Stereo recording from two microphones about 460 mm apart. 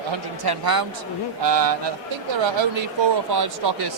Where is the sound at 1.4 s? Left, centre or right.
Right.